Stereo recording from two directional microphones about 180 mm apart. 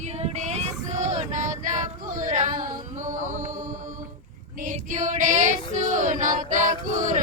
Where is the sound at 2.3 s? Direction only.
45° right (ahead or behind).